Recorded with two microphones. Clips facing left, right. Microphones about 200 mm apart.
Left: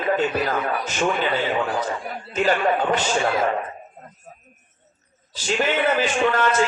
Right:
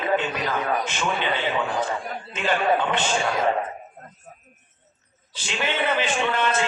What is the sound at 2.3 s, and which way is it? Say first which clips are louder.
Speech: left 2 dB; 40° left (ahead or behind).